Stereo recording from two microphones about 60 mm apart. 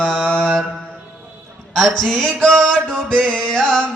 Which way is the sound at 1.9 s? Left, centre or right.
Centre.